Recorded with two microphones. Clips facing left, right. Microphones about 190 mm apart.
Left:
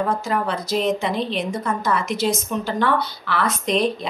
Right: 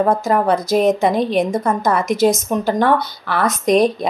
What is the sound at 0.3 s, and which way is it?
A woman's voice, 45° right (ahead or behind).